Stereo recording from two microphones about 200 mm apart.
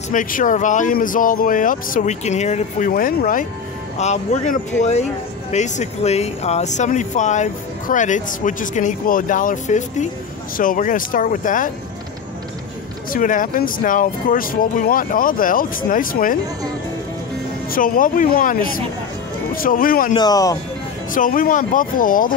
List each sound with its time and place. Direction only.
0.1 s speech: 40° left (ahead or behind)
13.1 s speech: 40° left (ahead or behind)
17.6 s speech: 45° left (ahead or behind)
20.2 s speech: 20° left (ahead or behind)
21.1 s speech: 40° left (ahead or behind)